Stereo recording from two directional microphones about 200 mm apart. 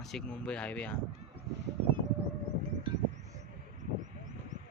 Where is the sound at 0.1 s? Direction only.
5° left (ahead or behind).